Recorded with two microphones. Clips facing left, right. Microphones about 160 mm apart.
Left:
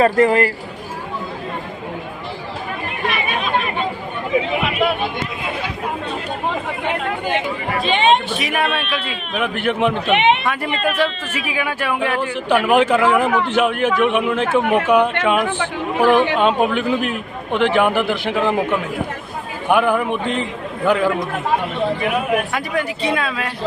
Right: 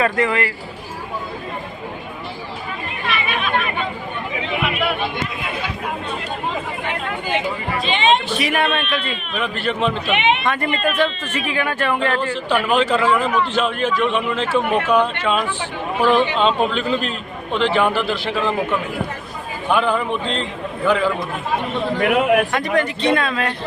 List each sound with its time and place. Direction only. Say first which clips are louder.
0.0 s speech: left 5 dB; 40° left (ahead or behind)
3.1 s chatter: even; 40° left (ahead or behind)
7.9 s speech: left 2 dB; 50° left (ahead or behind)
8.4 s a man's voice: right 1 dB; centre (ahead or behind)
9.3 s a man's voice: left 3 dB; 15° left (ahead or behind)
9.9 s a man's voice: left 4 dB; 60° left (ahead or behind)
10.4 s a man's voice: even; 5° left (ahead or behind)
15.4 s speech: left 4 dB; 55° left (ahead or behind)
16.0 s a man's voice: left 2 dB; 15° left (ahead or behind)
21.9 s a man's voice: right 3 dB; 70° right (ahead or behind)
22.5 s a man's voice: right 2 dB; 5° left (ahead or behind)